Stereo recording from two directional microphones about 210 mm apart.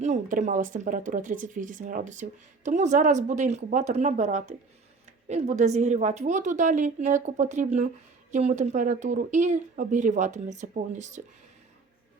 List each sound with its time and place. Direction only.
0.0 s speech: 35° right (ahead or behind)